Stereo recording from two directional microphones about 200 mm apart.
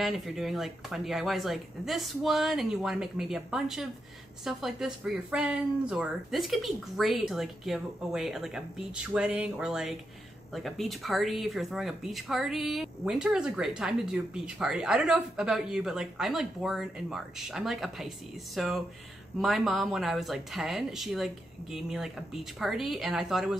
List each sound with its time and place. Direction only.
0.0 s speech: centre (ahead or behind)